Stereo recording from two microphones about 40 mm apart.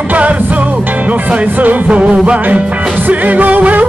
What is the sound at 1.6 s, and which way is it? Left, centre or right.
Music, right.